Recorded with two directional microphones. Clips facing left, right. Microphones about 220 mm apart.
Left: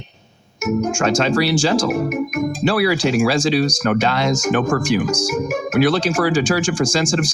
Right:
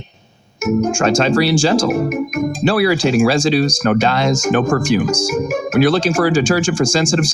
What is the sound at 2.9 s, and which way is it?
Speech, 30° right (ahead or behind).